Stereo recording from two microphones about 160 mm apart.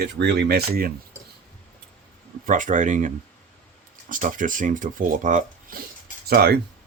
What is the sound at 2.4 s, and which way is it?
Speech, 55° right (ahead or behind).